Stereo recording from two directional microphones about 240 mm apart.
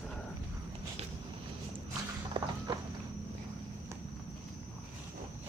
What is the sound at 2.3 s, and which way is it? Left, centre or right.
Walk, centre.